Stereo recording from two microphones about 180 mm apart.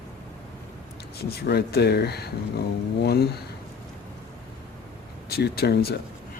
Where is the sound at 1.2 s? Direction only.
60° left (ahead or behind).